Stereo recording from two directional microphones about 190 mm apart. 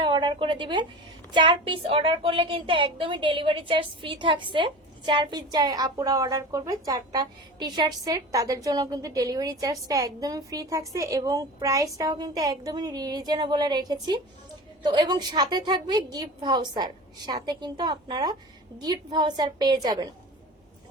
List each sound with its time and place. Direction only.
0.0 s a woman's voice: 25° right (ahead or behind)